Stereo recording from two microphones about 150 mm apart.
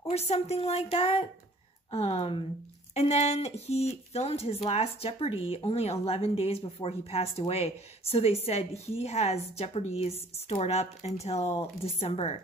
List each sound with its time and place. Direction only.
0.0 s a woman's voice: 45° left (ahead or behind)